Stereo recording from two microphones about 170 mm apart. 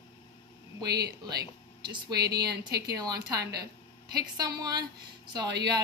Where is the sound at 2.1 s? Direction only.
70° right (ahead or behind).